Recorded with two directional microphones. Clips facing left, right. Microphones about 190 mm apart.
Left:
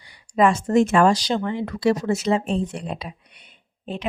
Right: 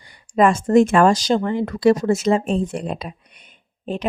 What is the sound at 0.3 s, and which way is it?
Speech, 50° right (ahead or behind).